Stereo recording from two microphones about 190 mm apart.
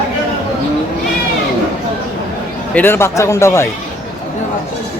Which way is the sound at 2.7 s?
10° left (ahead or behind).